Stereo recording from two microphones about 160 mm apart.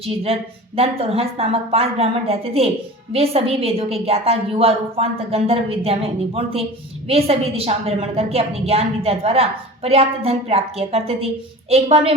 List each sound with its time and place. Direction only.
0.8 s a woman's voice: 40° right (ahead or behind)